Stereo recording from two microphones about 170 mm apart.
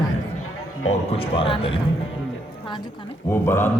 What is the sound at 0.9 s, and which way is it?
Speech, 35° left (ahead or behind).